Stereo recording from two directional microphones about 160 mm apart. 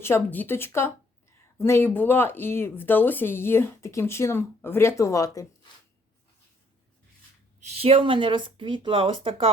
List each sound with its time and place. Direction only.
0.0 s speech: 15° left (ahead or behind)
7.6 s speech: 40° right (ahead or behind)